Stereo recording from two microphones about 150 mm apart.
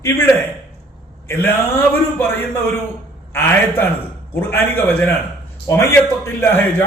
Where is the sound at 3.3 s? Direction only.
15° left (ahead or behind).